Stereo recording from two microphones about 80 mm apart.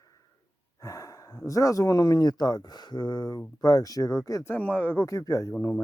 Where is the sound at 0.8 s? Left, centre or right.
Left.